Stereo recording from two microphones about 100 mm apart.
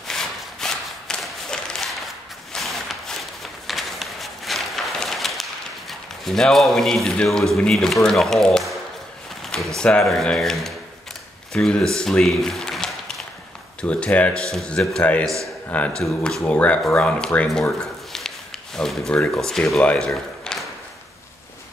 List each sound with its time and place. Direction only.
0.1 s a sound: 5° left (ahead or behind)
7.5 s speech: 5° left (ahead or behind)
9.8 s speech: 10° left (ahead or behind)
15.2 s a man's voice: 30° right (ahead or behind)
16.0 s speech: 5° left (ahead or behind)
20.1 s a sound: centre (ahead or behind)